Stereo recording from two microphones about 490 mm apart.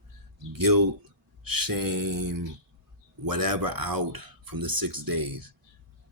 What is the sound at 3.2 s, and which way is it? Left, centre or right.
Speech, right.